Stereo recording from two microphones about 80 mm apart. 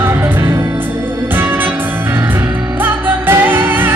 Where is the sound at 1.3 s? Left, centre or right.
Right.